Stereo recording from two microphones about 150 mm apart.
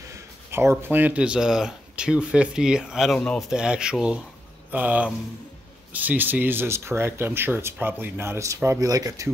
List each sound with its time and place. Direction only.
0.5 s speech: 15° right (ahead or behind)